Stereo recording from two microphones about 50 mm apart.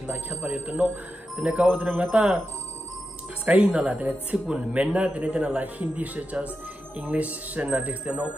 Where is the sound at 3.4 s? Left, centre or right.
Right.